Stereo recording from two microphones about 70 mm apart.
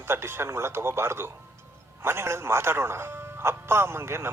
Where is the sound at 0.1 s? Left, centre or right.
Right.